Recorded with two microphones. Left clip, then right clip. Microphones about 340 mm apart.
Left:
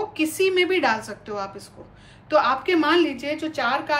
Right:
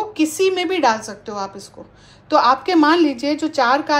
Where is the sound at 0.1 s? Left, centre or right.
Centre.